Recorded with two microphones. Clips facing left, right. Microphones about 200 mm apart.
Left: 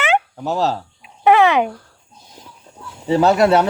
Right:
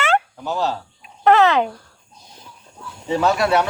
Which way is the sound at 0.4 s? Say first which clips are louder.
Left 3 dB; 35° left (ahead or behind).